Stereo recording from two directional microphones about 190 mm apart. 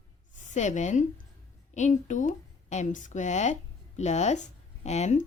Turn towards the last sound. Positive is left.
turn(degrees=35)  # may be behind; listen again after turning